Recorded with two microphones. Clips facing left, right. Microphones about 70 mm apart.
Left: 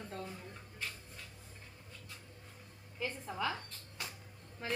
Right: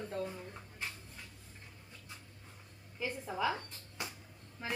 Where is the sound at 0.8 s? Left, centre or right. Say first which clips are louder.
Right 1 dB; centre.